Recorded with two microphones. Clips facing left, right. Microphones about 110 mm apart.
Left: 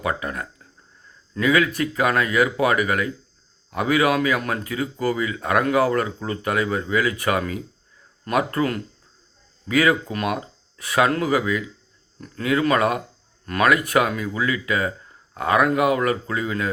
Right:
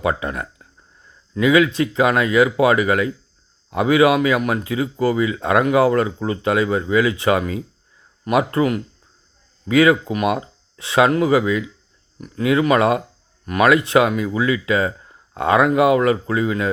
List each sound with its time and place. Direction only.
0.0 s speech: 25° right (ahead or behind)
12.2 s speech: 15° right (ahead or behind)
13.4 s speech: 15° right (ahead or behind)